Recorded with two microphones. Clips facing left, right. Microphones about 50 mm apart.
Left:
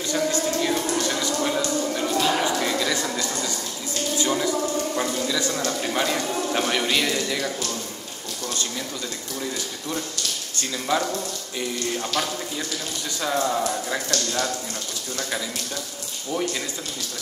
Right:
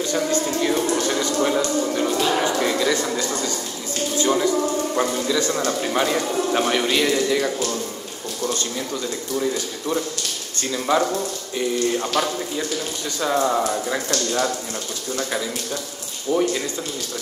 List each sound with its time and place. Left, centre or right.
0.0 s speech: centre
0.8 s a sound: centre
1.1 s a sound: centre
1.9 s music: centre
2.1 s a sound: centre
4.3 s speech: centre
9.4 s speech: centre
13.2 s speech: centre
16.3 s speech: centre